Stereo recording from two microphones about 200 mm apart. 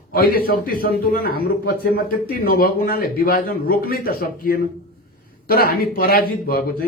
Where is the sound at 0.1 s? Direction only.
50° left (ahead or behind).